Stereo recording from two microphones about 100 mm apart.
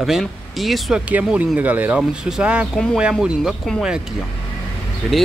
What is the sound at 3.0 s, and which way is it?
Speech, 10° right (ahead or behind).